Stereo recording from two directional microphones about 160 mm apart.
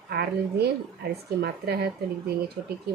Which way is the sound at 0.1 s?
85° right.